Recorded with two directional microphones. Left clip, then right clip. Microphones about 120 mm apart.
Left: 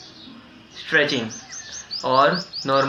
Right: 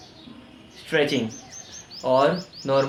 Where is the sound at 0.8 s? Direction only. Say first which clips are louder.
Left 3 dB; 45° right (ahead or behind).